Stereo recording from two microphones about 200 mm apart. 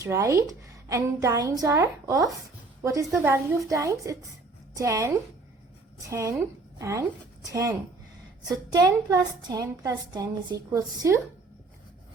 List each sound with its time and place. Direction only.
0.0 s a woman's voice: 15° right (ahead or behind)